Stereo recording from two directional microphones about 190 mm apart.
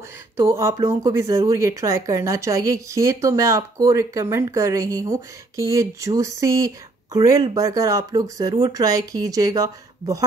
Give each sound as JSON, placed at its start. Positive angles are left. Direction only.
{"t": 0.4, "sound": "speech", "side_deg": -15}